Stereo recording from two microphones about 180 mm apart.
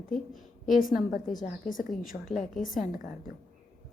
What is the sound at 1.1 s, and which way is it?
Speech, 45° left (ahead or behind).